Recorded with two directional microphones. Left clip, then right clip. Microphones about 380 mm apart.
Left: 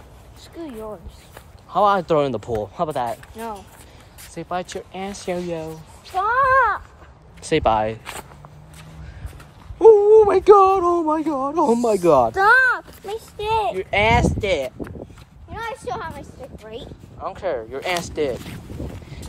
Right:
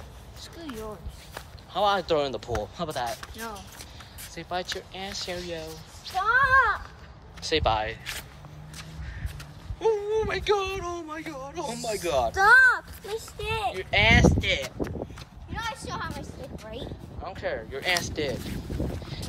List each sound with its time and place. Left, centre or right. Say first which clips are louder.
1.7 s speech: left 7 dB; centre
4.4 s speech: left 5 dB; centre
9.8 s a sound: left 15 dB; centre
10.8 s a sound: left 15 dB; left
11.1 s speech: left 15 dB; centre
12.3 s speech: left 3 dB; left
15.5 s a sound: left 5 dB; centre
17.2 s speech: left 7 dB; centre
17.7 s boat: left 4 dB; centre